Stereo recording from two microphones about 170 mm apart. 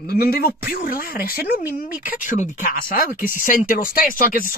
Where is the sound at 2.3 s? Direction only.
50° left (ahead or behind).